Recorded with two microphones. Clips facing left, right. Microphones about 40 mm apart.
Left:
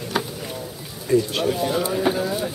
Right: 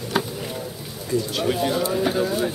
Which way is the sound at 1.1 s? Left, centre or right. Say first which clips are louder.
Left 5 dB; left.